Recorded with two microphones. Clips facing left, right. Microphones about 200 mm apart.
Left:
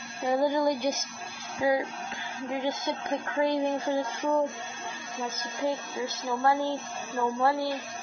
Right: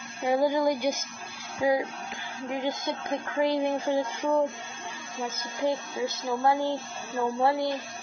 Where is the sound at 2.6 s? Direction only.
15° right (ahead or behind).